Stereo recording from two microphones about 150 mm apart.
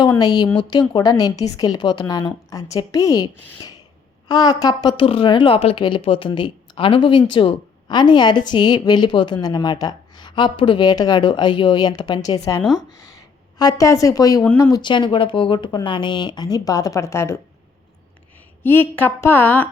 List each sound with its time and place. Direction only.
0.2 s speech: 25° left (ahead or behind)
4.3 s a woman's voice: 25° left (ahead or behind)
18.6 s a woman's voice: 15° left (ahead or behind)